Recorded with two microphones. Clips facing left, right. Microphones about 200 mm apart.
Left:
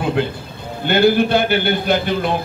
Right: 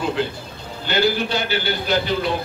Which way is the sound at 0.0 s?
55° left (ahead or behind).